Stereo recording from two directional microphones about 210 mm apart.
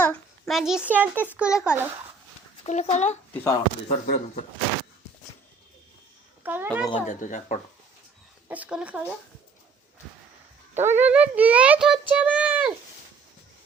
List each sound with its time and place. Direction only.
0.0 s a child's voice: 5° left (ahead or behind)
2.6 s speech: 35° left (ahead or behind)
3.3 s speech: 10° left (ahead or behind)
3.8 s speech: 35° left (ahead or behind)
6.4 s a woman's voice: 10° right (ahead or behind)
7.1 s speech: 35° left (ahead or behind)
8.4 s a child's voice: 5° right (ahead or behind)
10.8 s a child's voice: 10° right (ahead or behind)